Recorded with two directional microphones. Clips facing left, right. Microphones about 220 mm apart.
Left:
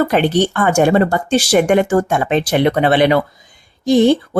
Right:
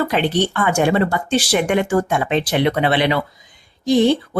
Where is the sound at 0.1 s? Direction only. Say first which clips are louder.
Left 4 dB; 45° left (ahead or behind).